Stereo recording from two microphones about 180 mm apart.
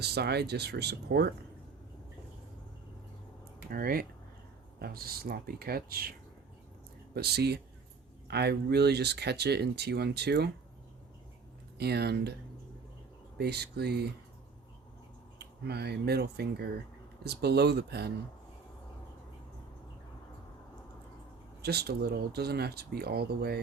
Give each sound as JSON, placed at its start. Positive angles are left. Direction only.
{"t": 0.0, "sound": "speech", "side_deg": -65}
{"t": 3.7, "sound": "speech", "side_deg": -55}
{"t": 11.8, "sound": "speech", "side_deg": -65}
{"t": 13.4, "sound": "speech", "side_deg": -65}
{"t": 15.4, "sound": "speech", "side_deg": -65}
{"t": 21.6, "sound": "speech", "side_deg": -65}